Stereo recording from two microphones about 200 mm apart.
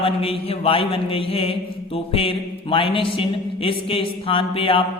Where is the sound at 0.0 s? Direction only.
30° left (ahead or behind).